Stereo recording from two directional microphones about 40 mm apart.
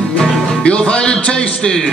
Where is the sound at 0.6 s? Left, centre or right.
Left.